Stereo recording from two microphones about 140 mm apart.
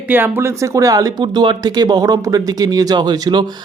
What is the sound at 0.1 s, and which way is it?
Speech, 15° right (ahead or behind).